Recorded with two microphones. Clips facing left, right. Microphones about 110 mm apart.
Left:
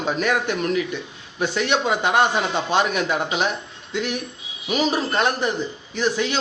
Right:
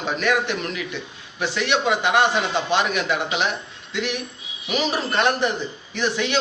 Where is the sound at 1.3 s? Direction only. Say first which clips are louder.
Left 1 dB; 40° left (ahead or behind).